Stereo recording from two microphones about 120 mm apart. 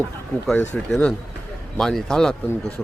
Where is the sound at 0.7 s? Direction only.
10° left (ahead or behind).